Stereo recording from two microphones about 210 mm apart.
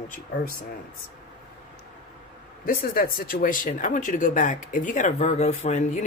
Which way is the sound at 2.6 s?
45° left (ahead or behind).